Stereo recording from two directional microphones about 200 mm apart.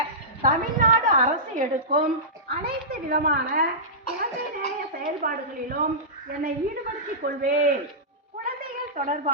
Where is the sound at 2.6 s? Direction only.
50° right (ahead or behind).